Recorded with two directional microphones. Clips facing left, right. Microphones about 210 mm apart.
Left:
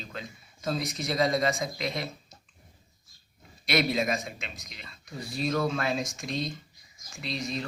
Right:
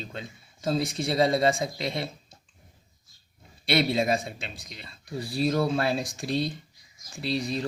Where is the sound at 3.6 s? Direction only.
30° right (ahead or behind).